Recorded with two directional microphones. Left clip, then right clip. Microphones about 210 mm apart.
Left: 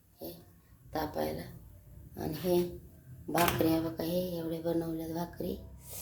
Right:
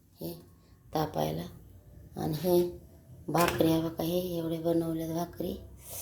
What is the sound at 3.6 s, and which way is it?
Speech, 20° right (ahead or behind).